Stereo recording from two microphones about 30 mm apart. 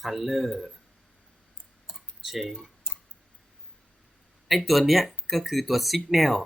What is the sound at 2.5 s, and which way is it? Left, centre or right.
Tick-tock, centre.